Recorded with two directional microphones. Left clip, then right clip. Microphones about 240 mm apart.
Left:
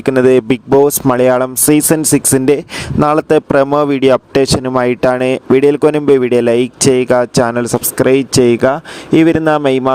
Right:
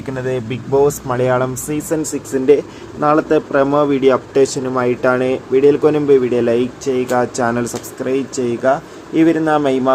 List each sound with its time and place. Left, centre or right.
0.0 s speech: left